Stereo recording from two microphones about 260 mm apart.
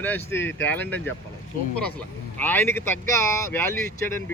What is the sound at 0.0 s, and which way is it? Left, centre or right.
Speech, centre.